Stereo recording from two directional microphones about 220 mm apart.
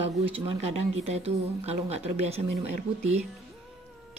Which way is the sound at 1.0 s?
30° right (ahead or behind).